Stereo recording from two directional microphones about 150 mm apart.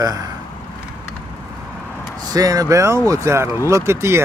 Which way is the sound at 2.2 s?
25° right (ahead or behind).